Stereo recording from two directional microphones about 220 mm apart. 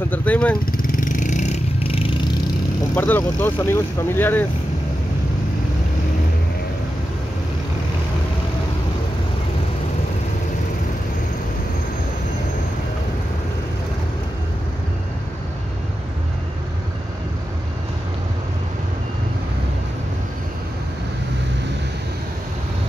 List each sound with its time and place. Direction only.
0.1 s vehicle: 5° left (ahead or behind)
0.8 s vehicle: 40° left (ahead or behind)
2.9 s speech: 10° left (ahead or behind)